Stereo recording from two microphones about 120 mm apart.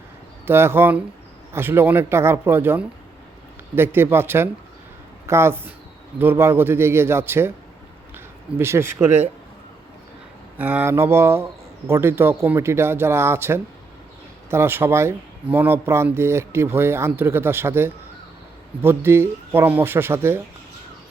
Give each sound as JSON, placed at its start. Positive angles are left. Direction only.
{"t": 0.4, "sound": "speech", "side_deg": -20}
{"t": 8.5, "sound": "speech", "side_deg": -20}
{"t": 10.6, "sound": "speech", "side_deg": -15}